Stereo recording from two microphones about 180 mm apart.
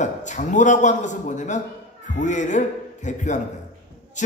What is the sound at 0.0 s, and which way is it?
A man's voice, 40° left (ahead or behind).